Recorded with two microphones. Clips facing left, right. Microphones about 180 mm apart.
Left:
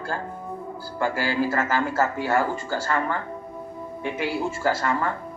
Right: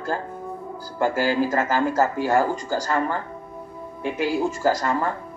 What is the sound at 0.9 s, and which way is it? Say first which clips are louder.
Speech: right 3 dB; 15° right (ahead or behind).